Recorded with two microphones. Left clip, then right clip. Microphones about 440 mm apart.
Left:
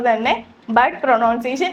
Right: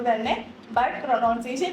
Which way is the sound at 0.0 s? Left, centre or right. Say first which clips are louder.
Left 7 dB; left.